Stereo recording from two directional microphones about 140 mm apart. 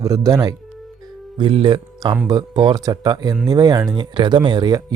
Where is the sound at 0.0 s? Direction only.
25° right (ahead or behind).